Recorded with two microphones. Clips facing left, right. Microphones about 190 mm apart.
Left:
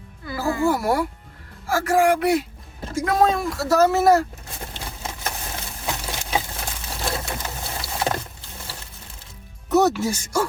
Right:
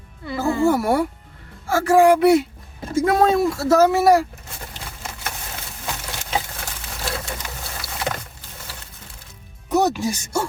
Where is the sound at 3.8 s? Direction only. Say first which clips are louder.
Right 1 dB; 15° right (ahead or behind).